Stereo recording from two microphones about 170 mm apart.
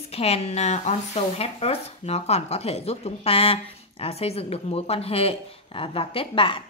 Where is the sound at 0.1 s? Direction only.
35° left (ahead or behind).